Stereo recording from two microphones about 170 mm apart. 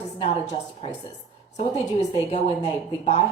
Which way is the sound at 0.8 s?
35° left (ahead or behind).